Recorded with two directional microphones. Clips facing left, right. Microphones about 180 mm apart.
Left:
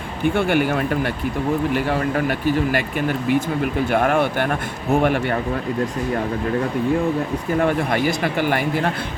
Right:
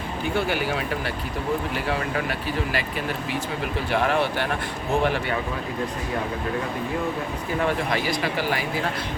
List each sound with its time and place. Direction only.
0.3 s a man's voice: 55° left (ahead or behind)
3.9 s a man's voice: 50° left (ahead or behind)
7.6 s a man's voice: 50° left (ahead or behind)